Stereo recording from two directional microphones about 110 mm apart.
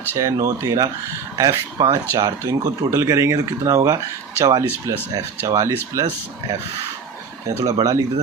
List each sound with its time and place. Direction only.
0.2 s speech: 30° right (ahead or behind)
7.6 s speech: 30° right (ahead or behind)